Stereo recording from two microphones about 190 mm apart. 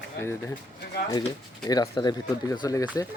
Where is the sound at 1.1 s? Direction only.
20° left (ahead or behind).